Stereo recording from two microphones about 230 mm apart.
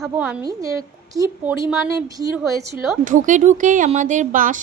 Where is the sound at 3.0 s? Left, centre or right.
Right.